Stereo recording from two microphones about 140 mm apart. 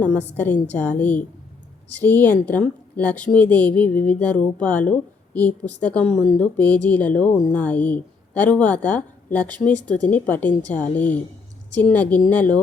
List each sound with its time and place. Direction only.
0.0 s a woman's voice: 10° left (ahead or behind)